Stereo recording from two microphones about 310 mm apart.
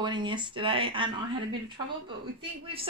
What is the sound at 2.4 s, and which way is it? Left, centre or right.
Speech, centre.